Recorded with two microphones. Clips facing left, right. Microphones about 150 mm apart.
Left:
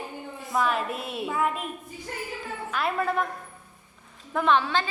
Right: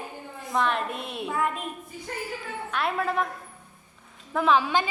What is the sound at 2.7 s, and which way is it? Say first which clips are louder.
Speech: even; centre (ahead or behind).